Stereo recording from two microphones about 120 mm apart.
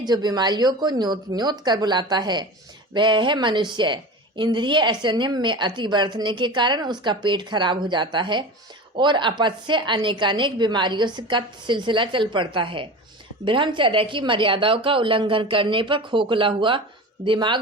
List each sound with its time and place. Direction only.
0.0 s a woman's voice: 35° right (ahead or behind)